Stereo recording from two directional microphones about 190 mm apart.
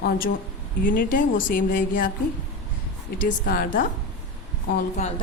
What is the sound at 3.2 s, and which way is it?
Speech, 45° left (ahead or behind).